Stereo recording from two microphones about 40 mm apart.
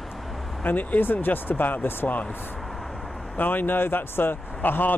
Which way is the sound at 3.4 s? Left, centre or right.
Left.